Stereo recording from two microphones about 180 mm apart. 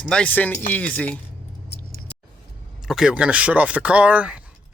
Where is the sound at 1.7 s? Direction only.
65° left (ahead or behind).